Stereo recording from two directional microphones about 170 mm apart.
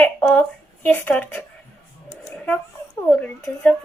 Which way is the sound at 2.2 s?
5° left (ahead or behind).